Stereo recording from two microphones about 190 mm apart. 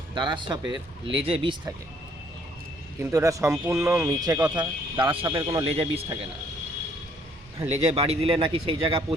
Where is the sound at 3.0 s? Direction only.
15° right (ahead or behind).